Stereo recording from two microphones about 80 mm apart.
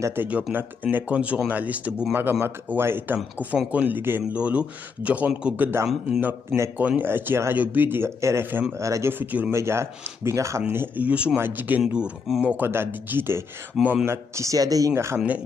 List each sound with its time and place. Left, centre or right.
0.0 s a man's voice: right
8.2 s speech: right
9.2 s speech: centre
9.5 s speech: right
11.1 s a man's voice: centre
11.3 s speech: right
11.8 s a man's voice: centre
12.6 s speech: right
15.0 s speech: right